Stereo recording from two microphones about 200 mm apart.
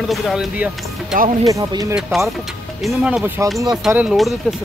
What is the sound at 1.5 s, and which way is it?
Speech, 15° right (ahead or behind).